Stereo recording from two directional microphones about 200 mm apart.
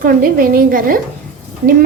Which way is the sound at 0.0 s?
45° right (ahead or behind).